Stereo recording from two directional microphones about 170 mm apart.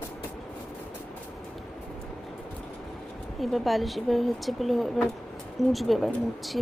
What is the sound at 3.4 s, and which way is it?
Speech, centre (ahead or behind).